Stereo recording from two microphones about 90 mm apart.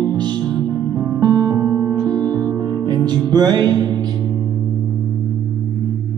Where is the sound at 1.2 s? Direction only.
40° right (ahead or behind).